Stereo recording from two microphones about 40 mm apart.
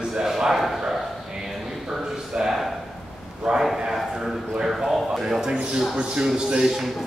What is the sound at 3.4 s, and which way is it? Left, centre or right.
Speech, centre.